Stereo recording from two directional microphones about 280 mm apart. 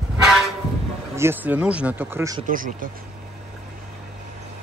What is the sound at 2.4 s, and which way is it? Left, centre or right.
Speech, right.